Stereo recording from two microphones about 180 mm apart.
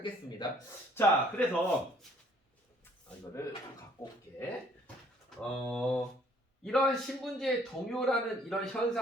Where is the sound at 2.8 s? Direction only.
15° left (ahead or behind).